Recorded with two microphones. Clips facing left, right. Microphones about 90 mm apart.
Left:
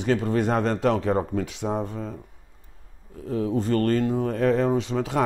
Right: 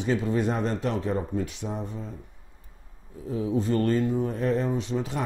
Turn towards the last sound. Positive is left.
turn(degrees=90)